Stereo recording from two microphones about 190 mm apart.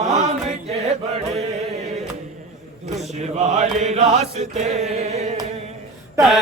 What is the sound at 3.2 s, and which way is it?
Chant, 40° right (ahead or behind).